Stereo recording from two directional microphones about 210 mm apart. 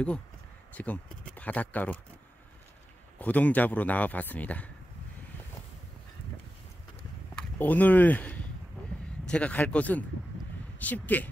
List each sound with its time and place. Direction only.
0.7 s a man's voice: 5° left (ahead or behind)
3.2 s a man's voice: 5° left (ahead or behind)
7.3 s a man's voice: 10° left (ahead or behind)